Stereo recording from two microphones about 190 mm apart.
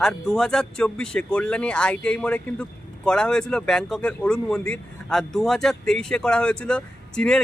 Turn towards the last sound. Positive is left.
turn(degrees=5)  # may be behind; listen again after turning